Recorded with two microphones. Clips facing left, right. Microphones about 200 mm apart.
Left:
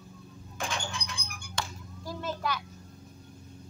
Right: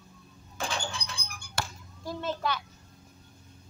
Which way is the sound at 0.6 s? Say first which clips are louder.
Right 1 dB; 35° right (ahead or behind).